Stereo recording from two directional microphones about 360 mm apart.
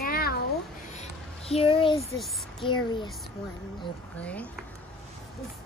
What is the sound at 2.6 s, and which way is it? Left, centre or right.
Speech, centre.